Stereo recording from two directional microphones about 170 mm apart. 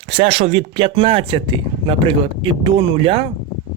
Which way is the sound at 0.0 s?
35° right (ahead or behind).